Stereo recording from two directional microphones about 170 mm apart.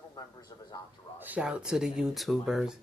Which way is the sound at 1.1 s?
10° right (ahead or behind).